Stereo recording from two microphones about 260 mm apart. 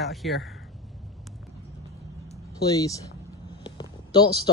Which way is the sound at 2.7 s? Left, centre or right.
Centre.